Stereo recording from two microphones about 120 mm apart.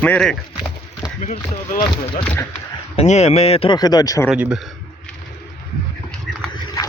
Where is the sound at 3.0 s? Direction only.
70° left (ahead or behind).